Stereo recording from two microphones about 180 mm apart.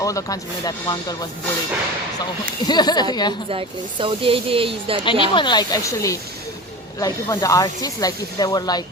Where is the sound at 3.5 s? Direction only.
30° right (ahead or behind).